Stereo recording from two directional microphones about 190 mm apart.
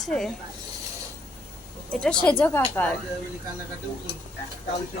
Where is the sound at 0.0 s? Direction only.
Centre (ahead or behind).